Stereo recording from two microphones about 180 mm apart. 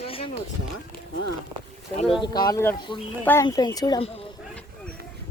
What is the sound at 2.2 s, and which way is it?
Speech, 20° left (ahead or behind).